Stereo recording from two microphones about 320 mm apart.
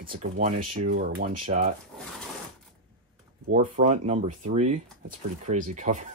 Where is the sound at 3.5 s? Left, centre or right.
Right.